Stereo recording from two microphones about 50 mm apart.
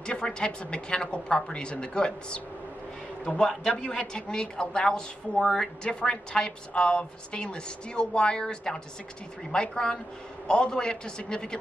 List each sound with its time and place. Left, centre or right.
0.0 s a woman's voice: centre